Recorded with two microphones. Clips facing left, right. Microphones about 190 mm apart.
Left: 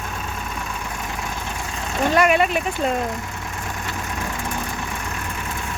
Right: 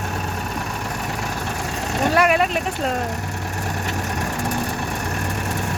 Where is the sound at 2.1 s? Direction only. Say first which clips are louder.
Left 1 dB; centre (ahead or behind).